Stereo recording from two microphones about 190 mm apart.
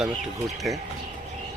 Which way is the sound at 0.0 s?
Centre (ahead or behind).